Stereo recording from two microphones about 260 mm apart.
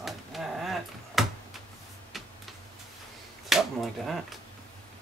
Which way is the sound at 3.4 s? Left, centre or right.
Centre.